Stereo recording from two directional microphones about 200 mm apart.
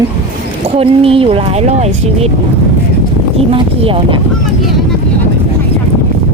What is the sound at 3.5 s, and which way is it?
Speech, 25° right (ahead or behind).